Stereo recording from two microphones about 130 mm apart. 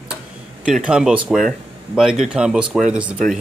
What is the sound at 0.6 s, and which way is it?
Speech, 5° right (ahead or behind).